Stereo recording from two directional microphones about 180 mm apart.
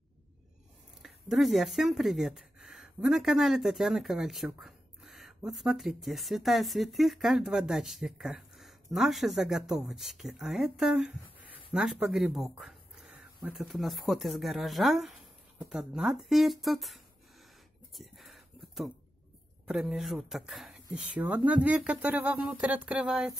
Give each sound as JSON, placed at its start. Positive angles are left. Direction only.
{"t": 1.0, "sound": "speech", "side_deg": 0}
{"t": 17.9, "sound": "a sound", "side_deg": 0}
{"t": 19.7, "sound": "speech", "side_deg": 0}